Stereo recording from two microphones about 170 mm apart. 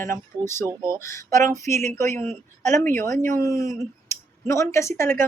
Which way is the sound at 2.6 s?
45° right (ahead or behind).